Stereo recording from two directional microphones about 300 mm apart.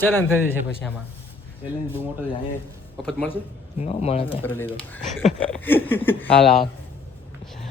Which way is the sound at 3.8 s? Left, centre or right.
Centre.